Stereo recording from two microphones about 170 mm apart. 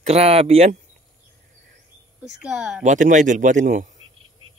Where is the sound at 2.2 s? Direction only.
5° right (ahead or behind).